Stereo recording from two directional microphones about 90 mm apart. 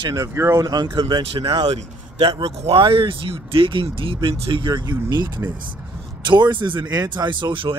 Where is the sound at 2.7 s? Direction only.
80° right.